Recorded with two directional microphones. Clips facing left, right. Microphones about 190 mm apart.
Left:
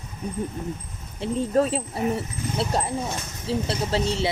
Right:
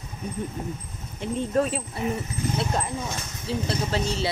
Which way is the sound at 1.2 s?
30° left (ahead or behind).